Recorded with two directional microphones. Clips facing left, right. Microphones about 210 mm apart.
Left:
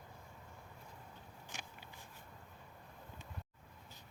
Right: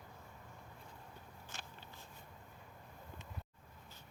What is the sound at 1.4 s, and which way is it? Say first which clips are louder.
Walk: left 2 dB; 15° left (ahead or behind).